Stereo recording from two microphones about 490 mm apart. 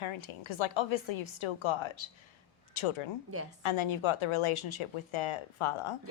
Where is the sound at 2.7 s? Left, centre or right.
Left.